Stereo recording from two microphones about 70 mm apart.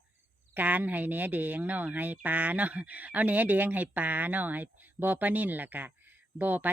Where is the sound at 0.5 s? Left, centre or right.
Right.